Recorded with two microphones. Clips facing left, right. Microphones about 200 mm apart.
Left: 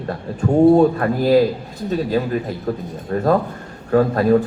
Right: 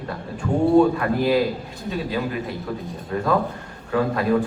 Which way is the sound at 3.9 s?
45° left (ahead or behind).